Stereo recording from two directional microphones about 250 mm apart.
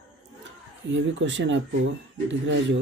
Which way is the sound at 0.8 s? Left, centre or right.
Right.